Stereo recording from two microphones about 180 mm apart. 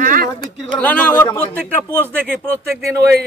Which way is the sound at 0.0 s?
50° right (ahead or behind).